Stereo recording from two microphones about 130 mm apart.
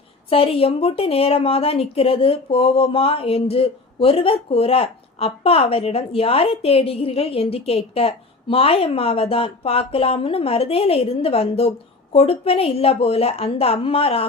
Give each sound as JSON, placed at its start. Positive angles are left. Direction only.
{"t": 0.3, "sound": "a woman's voice", "side_deg": 45}